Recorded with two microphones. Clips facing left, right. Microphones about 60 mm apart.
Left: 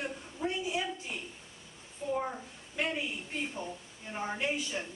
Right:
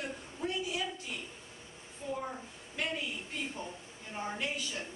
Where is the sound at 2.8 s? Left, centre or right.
Left.